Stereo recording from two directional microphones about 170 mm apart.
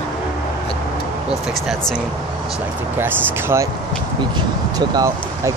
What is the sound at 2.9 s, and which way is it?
Speech, 15° right (ahead or behind).